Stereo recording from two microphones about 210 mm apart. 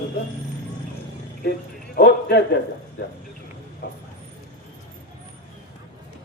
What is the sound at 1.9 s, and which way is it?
Speech, 50° left (ahead or behind).